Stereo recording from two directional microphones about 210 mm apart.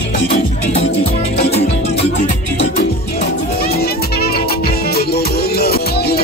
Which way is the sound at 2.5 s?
55° left (ahead or behind).